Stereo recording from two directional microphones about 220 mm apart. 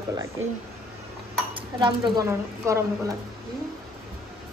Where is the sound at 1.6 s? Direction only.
20° right (ahead or behind).